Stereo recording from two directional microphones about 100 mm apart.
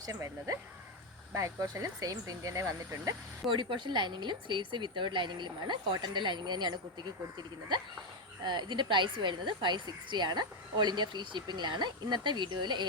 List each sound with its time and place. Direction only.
0.0 s speech: 35° right (ahead or behind)
3.5 s a woman's voice: 55° right (ahead or behind)
8.4 s a woman's voice: 50° right (ahead or behind)